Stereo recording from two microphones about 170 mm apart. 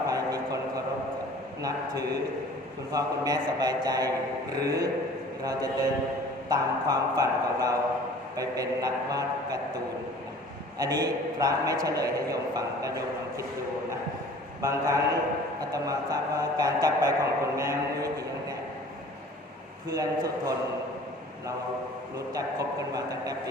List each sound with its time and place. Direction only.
0.1 s a sound: 20° right (ahead or behind)
2.9 s a man's voice: 20° right (ahead or behind)
14.6 s a man's voice: 20° right (ahead or behind)
19.9 s a man's voice: 20° right (ahead or behind)
22.3 s a man's voice: 20° right (ahead or behind)